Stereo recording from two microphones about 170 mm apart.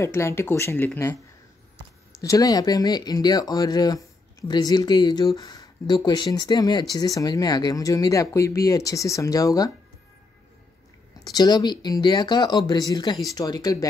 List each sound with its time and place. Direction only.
0.0 s speech: 15° left (ahead or behind)
2.1 s speech: 20° left (ahead or behind)
11.2 s speech: 25° left (ahead or behind)